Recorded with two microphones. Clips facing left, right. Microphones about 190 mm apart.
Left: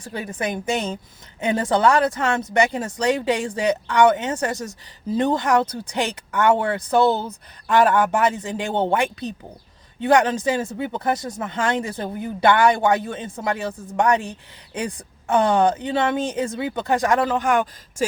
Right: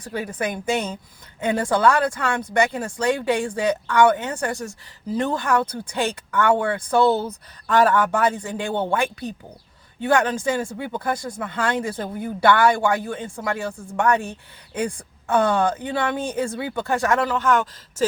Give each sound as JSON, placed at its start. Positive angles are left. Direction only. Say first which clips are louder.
{"t": 0.4, "sound": "speech", "louder": "left 1 dB", "side_deg": 20}